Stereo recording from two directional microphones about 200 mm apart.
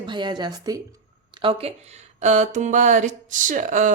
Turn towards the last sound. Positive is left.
turn(degrees=-40)  # may be behind; listen again after turning